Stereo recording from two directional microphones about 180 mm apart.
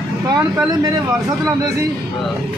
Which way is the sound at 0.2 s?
20° right (ahead or behind).